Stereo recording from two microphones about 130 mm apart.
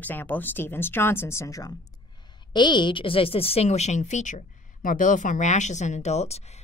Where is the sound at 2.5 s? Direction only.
35° left (ahead or behind).